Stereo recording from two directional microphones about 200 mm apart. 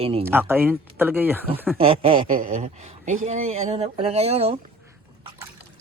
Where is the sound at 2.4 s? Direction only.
40° right (ahead or behind).